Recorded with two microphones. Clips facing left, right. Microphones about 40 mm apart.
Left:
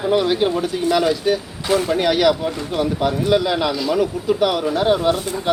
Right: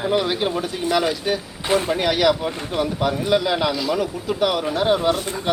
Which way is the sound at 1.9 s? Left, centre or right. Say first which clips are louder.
Left 4 dB; centre.